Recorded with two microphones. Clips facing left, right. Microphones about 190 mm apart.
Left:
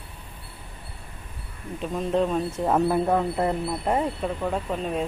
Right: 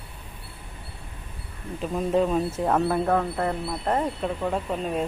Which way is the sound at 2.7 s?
10° left (ahead or behind).